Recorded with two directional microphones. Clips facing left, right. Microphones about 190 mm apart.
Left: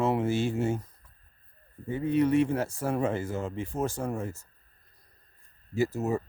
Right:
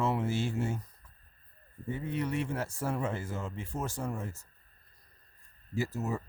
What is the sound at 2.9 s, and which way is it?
Speech, 50° left (ahead or behind).